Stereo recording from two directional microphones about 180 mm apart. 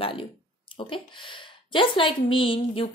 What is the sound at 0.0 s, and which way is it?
Speech, 30° left (ahead or behind).